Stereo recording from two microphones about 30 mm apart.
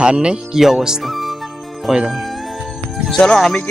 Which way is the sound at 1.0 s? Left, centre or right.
Centre.